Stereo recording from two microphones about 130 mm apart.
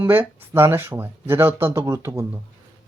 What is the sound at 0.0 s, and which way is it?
Speech, 20° right (ahead or behind).